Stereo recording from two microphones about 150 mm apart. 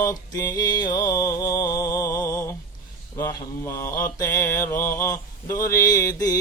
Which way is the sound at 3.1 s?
20° left (ahead or behind).